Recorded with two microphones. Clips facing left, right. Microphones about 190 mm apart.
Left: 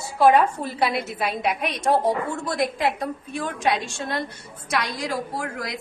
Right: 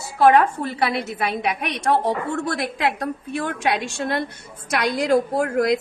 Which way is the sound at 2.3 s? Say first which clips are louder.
Right 1 dB; 65° right (ahead or behind).